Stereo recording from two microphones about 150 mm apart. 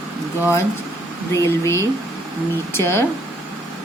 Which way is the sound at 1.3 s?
20° left (ahead or behind).